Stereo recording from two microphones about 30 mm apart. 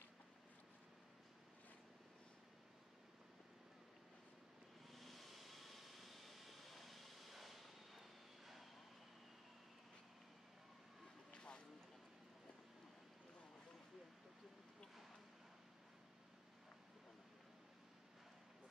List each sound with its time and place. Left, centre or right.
4.9 s vehicle: centre
11.3 s vehicle: left